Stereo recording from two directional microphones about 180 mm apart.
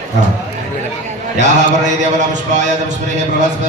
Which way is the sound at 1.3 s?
40° right (ahead or behind).